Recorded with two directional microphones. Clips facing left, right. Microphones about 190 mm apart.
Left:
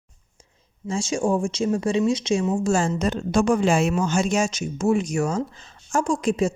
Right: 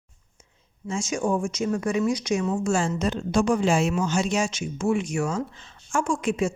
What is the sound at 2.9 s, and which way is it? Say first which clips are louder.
Speech: left 2 dB; 45° left (ahead or behind).